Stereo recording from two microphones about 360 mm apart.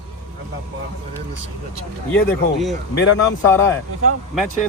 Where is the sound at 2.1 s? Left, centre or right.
Centre.